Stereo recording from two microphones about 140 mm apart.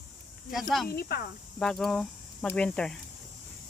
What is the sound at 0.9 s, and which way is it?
Speech, 90° left.